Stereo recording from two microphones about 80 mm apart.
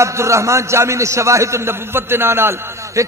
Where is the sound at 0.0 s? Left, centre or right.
Right.